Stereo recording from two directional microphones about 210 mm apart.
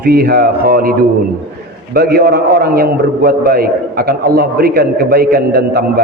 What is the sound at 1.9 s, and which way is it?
A man's voice, 50° right (ahead or behind).